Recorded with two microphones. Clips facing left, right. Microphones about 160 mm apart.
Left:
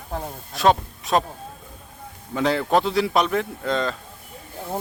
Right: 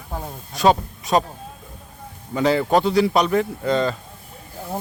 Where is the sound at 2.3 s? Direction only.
Centre (ahead or behind).